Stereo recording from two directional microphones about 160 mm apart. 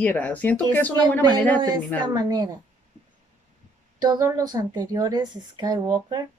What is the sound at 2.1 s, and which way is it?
Speech, 25° right (ahead or behind).